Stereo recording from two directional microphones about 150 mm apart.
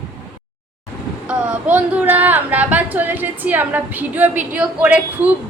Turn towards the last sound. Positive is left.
turn(degrees=-10)  # may be behind; listen again after turning